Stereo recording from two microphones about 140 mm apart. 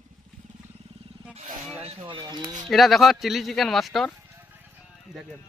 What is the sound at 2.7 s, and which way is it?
Speech, centre (ahead or behind).